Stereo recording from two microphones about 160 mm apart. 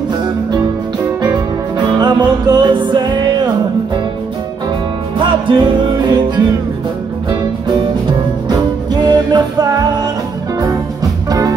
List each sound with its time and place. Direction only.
2.0 s music: 25° right (ahead or behind)
5.5 s music: 30° right (ahead or behind)
9.0 s music: 25° right (ahead or behind)
11.2 s music: 20° right (ahead or behind)